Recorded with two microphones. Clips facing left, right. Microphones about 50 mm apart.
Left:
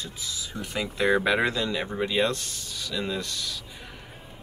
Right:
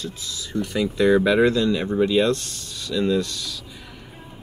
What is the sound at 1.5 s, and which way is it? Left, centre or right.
Speech, centre.